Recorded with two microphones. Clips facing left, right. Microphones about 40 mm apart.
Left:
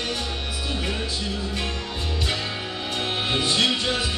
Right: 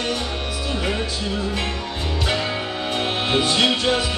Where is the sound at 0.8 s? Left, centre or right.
Right.